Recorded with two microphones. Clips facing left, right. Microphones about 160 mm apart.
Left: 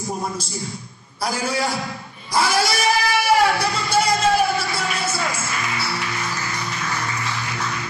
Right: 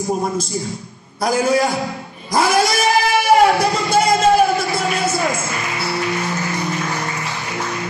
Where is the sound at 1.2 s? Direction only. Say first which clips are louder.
Right 7 dB; 50° right (ahead or behind).